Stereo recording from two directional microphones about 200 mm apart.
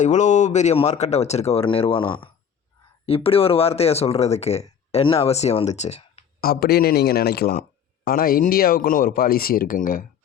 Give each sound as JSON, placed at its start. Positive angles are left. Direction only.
{"t": 0.0, "sound": "speech", "side_deg": 35}
{"t": 6.4, "sound": "speech", "side_deg": 50}